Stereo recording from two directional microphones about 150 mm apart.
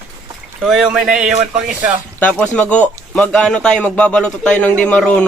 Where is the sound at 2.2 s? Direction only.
10° left (ahead or behind).